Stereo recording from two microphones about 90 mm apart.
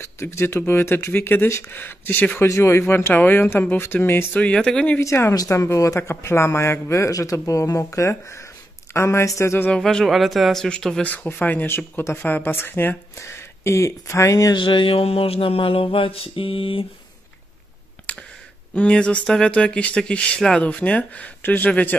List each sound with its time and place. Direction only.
0.0 s speech: 30° left (ahead or behind)
4.4 s speech: 10° left (ahead or behind)
5.0 s speech: 30° left (ahead or behind)
5.3 s speech: 40° left (ahead or behind)
9.7 s speech: 5° left (ahead or behind); by 14.5 s 35° left (ahead or behind)
14.5 s speech: 65° left (ahead or behind); by 16.8 s 85° left
18.1 s a sound: 15° left (ahead or behind)
18.8 s speech: 15° left (ahead or behind)